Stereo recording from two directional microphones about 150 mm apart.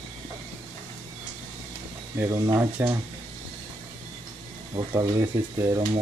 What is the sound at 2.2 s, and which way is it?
Speech, 20° right (ahead or behind).